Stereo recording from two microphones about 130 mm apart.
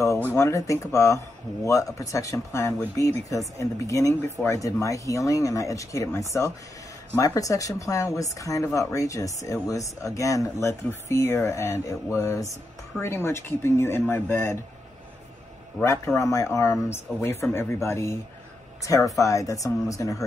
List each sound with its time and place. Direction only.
0.3 s speech: 25° left (ahead or behind)
16.2 s speech: 25° left (ahead or behind)